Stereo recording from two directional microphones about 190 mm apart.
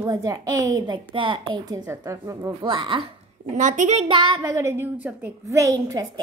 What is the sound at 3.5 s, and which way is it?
Speech, 40° right (ahead or behind).